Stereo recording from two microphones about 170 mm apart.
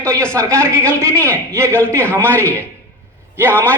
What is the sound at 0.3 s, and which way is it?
A man's voice, 15° right (ahead or behind).